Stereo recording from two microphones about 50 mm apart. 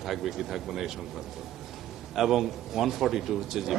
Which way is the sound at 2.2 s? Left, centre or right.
Centre.